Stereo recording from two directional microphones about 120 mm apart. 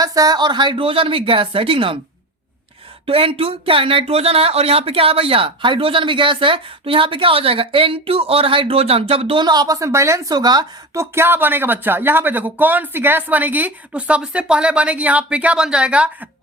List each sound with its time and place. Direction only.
0.0 s speech: 30° right (ahead or behind); by 2.0 s 50° right (ahead or behind)
3.1 s speech: 50° right (ahead or behind); by 10.3 s 25° right (ahead or behind)
10.3 s speech: 35° right (ahead or behind)
10.9 s speech: 20° right (ahead or behind)